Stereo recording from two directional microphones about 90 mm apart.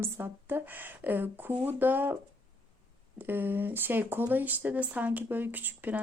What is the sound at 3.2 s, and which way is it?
Speech, 25° right (ahead or behind).